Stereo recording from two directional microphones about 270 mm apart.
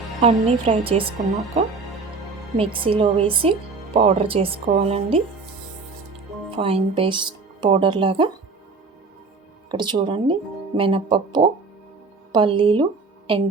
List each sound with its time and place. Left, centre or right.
0.2 s speech: right
2.6 s speech: centre
6.5 s speech: right
9.7 s a woman's voice: centre